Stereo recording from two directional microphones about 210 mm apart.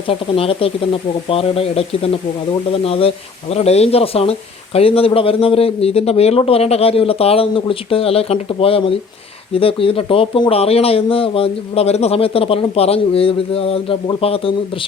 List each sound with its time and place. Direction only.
0.1 s speech: 25° left (ahead or behind)